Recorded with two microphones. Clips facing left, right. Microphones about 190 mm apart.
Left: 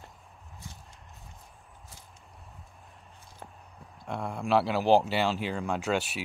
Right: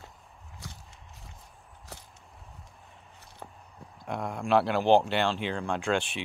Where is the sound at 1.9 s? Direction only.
75° right (ahead or behind).